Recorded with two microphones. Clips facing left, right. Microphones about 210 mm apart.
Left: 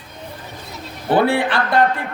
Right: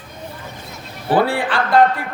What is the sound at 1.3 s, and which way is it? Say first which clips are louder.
Speech: left 2 dB; 25° left (ahead or behind).